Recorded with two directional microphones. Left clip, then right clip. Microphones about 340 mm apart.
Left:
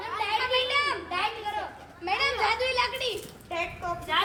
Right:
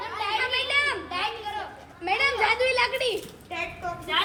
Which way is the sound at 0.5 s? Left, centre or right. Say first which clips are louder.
Right 1 dB; right.